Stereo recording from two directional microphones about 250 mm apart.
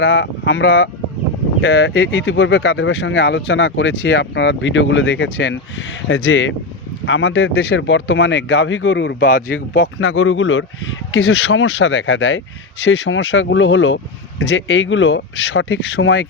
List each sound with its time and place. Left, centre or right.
0.0 s speech: left
10.0 s speech: left